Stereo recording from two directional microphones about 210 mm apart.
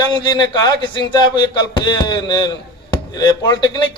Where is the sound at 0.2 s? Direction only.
20° left (ahead or behind).